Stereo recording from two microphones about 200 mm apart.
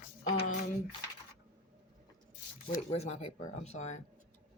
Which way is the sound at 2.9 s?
30° left (ahead or behind).